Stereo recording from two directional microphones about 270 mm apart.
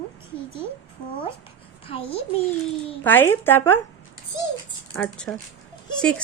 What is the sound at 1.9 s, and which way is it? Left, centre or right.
Speech, left.